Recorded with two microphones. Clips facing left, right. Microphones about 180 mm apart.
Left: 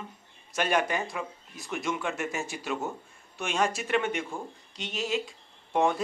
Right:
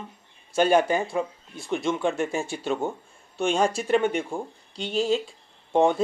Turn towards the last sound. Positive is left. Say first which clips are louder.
# right 5 dB
turn(degrees=-30)  # may be behind; listen again after turning